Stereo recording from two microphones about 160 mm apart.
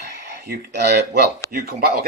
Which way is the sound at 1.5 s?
65° right (ahead or behind).